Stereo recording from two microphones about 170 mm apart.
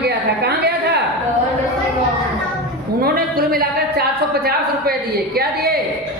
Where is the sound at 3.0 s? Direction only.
60° right (ahead or behind).